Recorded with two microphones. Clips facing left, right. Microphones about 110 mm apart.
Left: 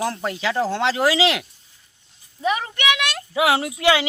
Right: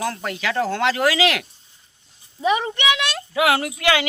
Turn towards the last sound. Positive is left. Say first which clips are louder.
# left 1 dB
turn(degrees=25)  # may be behind; listen again after turning